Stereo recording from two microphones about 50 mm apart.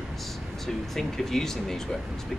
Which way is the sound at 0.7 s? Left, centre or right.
Centre.